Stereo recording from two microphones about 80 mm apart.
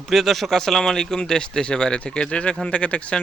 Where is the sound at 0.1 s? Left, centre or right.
Centre.